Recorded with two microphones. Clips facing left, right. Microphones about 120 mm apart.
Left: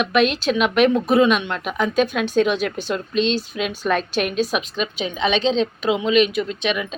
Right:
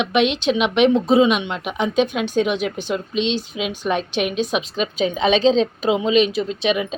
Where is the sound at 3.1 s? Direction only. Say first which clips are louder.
Left 2 dB; 75° right (ahead or behind).